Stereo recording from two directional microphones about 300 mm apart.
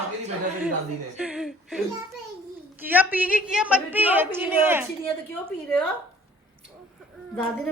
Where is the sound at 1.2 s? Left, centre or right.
Centre.